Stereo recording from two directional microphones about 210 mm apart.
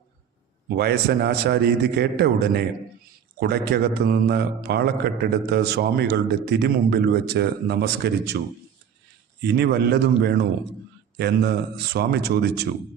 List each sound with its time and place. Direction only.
0.7 s a man's voice: 50° right (ahead or behind)
9.4 s a man's voice: 50° right (ahead or behind)